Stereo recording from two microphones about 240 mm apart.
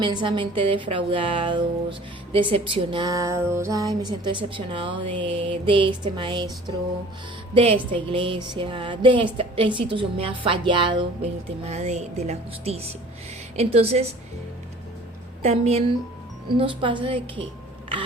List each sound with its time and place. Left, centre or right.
0.0 s speech: centre
7.5 s speech: right
15.4 s speech: right